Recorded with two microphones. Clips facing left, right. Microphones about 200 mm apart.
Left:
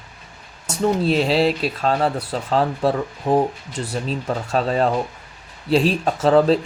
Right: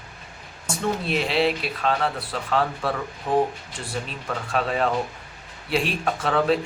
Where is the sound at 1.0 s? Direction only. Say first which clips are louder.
Left 3 dB; 35° left (ahead or behind).